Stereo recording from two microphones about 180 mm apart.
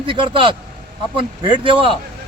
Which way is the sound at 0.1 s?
30° right (ahead or behind).